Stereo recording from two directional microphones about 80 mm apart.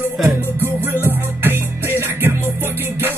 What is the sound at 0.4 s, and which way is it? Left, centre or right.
Music, right.